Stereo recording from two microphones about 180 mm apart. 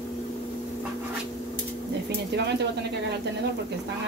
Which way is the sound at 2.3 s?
70° right (ahead or behind).